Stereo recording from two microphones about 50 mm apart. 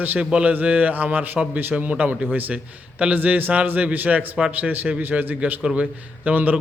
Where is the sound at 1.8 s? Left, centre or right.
Right.